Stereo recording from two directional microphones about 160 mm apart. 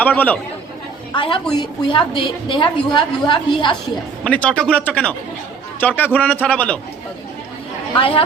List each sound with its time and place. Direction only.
0.0 s speech: 10° left (ahead or behind)
1.1 s a woman's voice: 30° left (ahead or behind)
4.2 s speech: 5° left (ahead or behind)
7.9 s a woman's voice: 35° left (ahead or behind)